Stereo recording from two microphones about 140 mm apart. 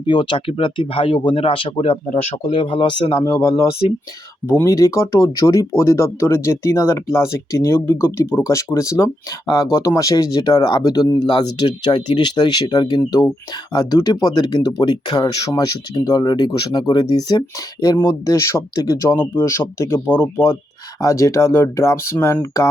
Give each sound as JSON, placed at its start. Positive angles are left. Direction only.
{"t": 0.0, "sound": "speech", "side_deg": 35}
{"t": 2.0, "sound": "speech", "side_deg": 55}
{"t": 2.5, "sound": "speech", "side_deg": 35}